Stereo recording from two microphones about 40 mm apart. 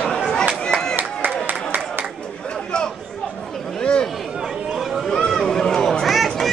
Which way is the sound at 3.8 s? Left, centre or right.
Left.